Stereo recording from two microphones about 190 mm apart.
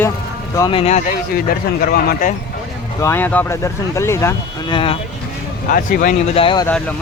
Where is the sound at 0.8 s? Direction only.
35° left (ahead or behind).